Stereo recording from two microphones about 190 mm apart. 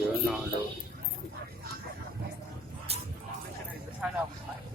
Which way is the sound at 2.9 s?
30° right (ahead or behind).